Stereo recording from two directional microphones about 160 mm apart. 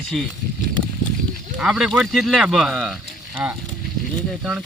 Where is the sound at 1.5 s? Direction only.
5° right (ahead or behind).